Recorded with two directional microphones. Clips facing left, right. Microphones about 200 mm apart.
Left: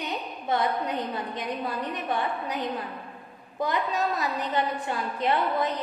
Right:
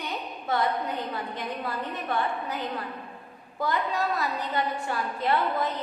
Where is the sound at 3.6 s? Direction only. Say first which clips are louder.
Left 1 dB; 20° left (ahead or behind).